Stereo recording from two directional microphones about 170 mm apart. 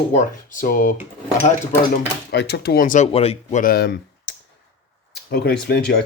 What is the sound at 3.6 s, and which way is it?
Speech, 65° left (ahead or behind).